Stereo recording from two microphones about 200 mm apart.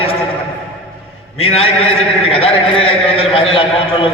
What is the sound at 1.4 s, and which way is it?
A man's voice, 30° left (ahead or behind).